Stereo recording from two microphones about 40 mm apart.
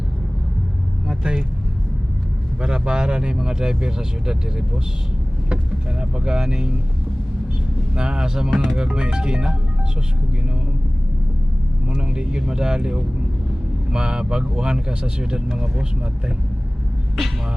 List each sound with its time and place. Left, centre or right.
1.0 s vehicle: right
2.6 s speech: right
6.0 s speech: right
7.9 s speech: right
11.9 s speech: right